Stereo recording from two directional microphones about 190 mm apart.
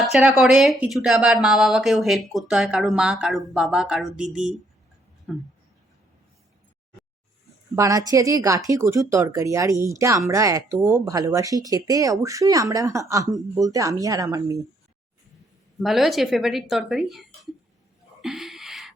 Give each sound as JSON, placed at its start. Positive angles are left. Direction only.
{"t": 0.0, "sound": "speech", "side_deg": -5}
{"t": 7.8, "sound": "speech", "side_deg": -20}
{"t": 15.8, "sound": "speech", "side_deg": 0}
{"t": 18.2, "sound": "a sound", "side_deg": 0}